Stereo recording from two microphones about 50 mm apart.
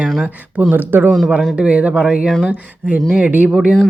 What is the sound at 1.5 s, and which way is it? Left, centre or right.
Speech, right.